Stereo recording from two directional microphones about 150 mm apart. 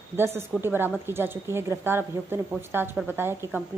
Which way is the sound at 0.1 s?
15° right (ahead or behind).